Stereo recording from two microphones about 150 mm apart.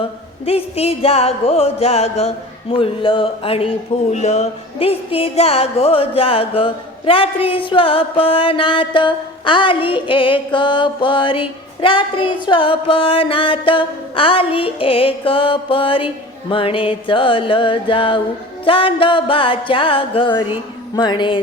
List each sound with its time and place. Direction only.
0.4 s music: 40° left (ahead or behind)
4.1 s music: 50° left (ahead or behind); by 21.4 s 35° left (ahead or behind)